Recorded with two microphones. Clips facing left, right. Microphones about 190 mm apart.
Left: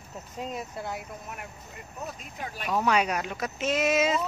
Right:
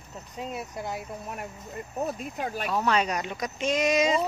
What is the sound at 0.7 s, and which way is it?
Speech, 20° right (ahead or behind).